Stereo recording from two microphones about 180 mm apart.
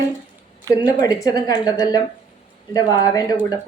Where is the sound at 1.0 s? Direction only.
20° left (ahead or behind).